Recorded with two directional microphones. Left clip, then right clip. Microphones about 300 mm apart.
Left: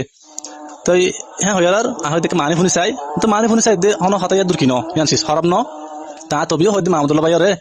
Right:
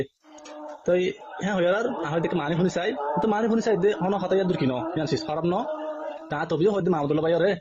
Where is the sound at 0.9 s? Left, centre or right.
Left.